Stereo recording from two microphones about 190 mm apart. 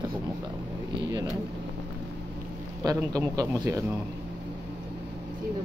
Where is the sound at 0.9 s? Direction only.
20° right (ahead or behind).